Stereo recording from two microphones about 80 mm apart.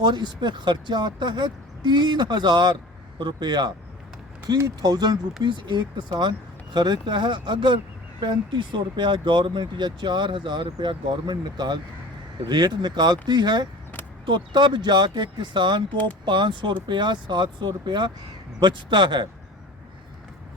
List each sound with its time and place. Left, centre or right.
0.0 s speech: right
4.5 s speech: right
5.4 s speech: right
14.3 s speech: right
18.6 s speech: right